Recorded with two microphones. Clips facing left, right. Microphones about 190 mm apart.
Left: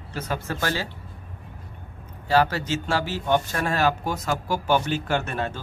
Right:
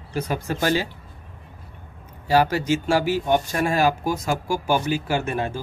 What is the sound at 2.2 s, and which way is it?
Speech, 15° right (ahead or behind).